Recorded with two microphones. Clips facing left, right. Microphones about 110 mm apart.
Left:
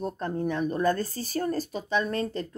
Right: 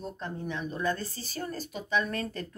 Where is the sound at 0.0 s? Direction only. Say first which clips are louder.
Left 7 dB; 50° left (ahead or behind).